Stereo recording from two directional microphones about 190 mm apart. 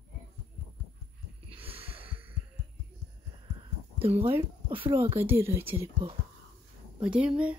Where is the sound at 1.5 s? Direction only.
30° right (ahead or behind).